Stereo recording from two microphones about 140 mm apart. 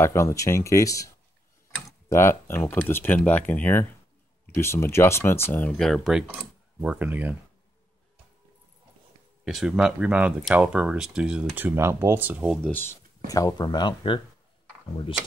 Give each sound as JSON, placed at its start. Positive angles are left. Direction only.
{"t": 0.0, "sound": "speech", "side_deg": 20}
{"t": 5.7, "sound": "speech", "side_deg": 5}
{"t": 9.4, "sound": "speech", "side_deg": -5}
{"t": 12.6, "sound": "speech", "side_deg": 15}
{"t": 13.3, "sound": "speech", "side_deg": 25}